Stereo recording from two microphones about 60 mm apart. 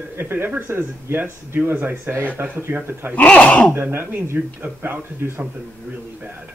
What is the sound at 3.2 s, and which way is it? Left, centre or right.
Speech, left.